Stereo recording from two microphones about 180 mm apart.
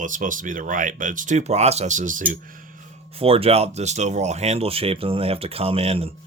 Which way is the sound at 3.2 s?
30° right (ahead or behind).